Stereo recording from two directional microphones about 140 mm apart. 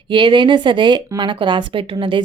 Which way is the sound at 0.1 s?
35° right (ahead or behind).